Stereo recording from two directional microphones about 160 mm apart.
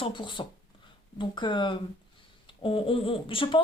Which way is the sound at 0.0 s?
30° left (ahead or behind).